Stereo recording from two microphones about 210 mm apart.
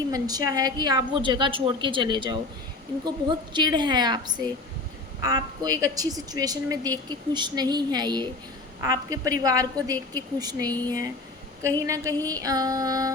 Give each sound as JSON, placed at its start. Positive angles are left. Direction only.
{"t": 0.1, "sound": "a woman's voice", "side_deg": -15}